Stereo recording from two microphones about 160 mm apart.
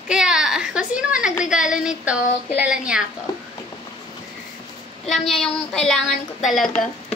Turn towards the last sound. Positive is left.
turn(degrees=0)  # may be behind; listen again after turning